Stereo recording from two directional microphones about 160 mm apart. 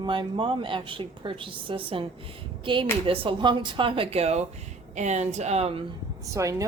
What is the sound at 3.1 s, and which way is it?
A woman's voice, 30° right (ahead or behind).